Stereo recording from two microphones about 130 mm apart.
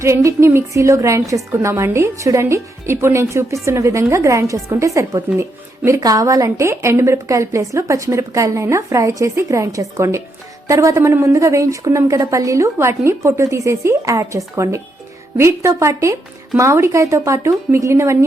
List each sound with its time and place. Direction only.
0.0 s a woman's voice: 25° right (ahead or behind)